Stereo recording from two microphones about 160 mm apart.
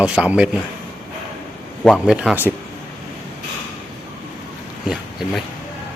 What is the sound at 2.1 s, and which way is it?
Speech, 10° right (ahead or behind).